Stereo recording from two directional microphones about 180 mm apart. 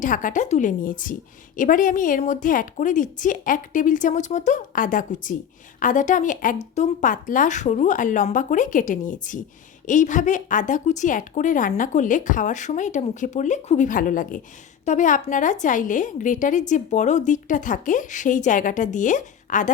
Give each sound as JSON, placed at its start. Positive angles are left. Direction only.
{"t": 0.0, "sound": "a woman's voice", "side_deg": 45}